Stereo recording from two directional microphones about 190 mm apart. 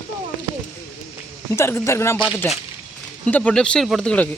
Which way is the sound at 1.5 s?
15° left (ahead or behind).